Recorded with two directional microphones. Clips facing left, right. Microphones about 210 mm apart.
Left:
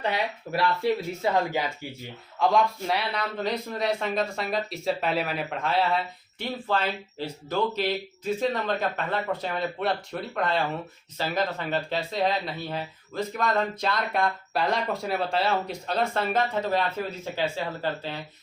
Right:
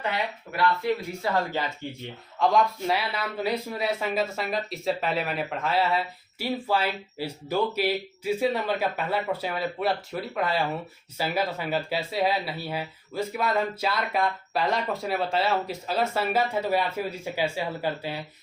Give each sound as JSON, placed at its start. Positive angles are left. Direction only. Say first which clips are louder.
{"t": 0.5, "sound": "speech", "louder": "even", "side_deg": 25}
{"t": 1.8, "sound": "speech", "louder": "right 2 dB", "side_deg": 5}